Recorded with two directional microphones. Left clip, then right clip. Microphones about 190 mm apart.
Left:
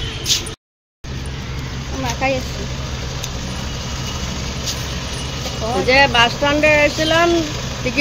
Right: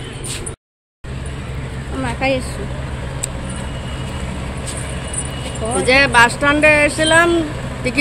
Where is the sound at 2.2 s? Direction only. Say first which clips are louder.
Right 1 dB; 25° right (ahead or behind).